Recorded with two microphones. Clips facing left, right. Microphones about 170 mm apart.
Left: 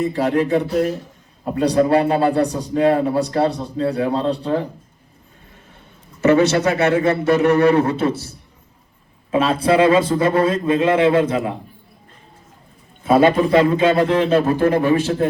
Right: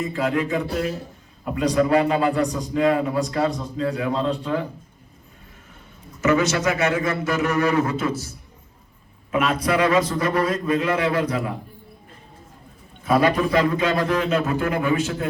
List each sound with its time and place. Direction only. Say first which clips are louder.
0.0 s a man's voice: left 5 dB; 35° left (ahead or behind)
6.5 s a man's voice: left 5 dB; 30° left (ahead or behind)
9.3 s a man's voice: left 5 dB; 30° left (ahead or behind)
13.1 s a man's voice: left 5 dB; 25° left (ahead or behind)